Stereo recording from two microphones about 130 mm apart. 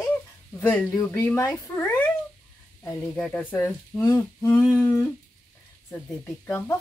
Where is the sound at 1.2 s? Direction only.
20° left (ahead or behind).